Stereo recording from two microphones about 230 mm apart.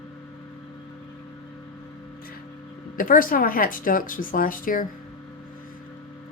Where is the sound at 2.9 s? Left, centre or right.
Left.